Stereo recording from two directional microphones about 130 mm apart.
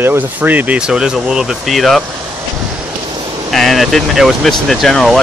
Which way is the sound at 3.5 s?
Centre (ahead or behind).